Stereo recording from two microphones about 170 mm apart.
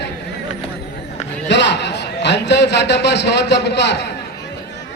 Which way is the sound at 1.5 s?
90° left.